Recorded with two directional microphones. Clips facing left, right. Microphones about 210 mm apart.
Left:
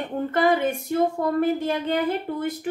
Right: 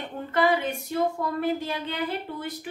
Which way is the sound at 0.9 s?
50° left (ahead or behind).